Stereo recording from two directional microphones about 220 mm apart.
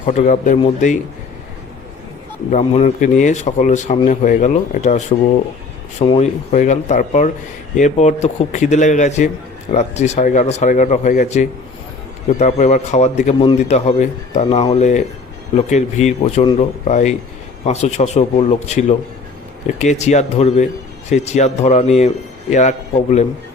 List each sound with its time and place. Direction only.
0.0 s speech: 30° left (ahead or behind)
2.5 s speech: 30° left (ahead or behind)